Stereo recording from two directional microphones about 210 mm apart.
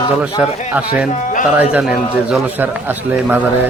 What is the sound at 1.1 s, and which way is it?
Speech, 35° left (ahead or behind).